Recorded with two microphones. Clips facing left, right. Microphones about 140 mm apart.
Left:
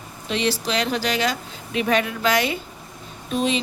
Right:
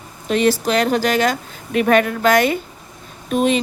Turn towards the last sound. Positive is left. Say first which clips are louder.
# right 5 dB
turn(degrees=-55)  # may be behind; listen again after turning